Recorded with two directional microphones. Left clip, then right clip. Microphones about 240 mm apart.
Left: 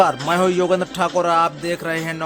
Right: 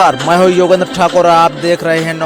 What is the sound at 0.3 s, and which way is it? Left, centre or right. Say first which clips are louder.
Speech: right 9 dB; right.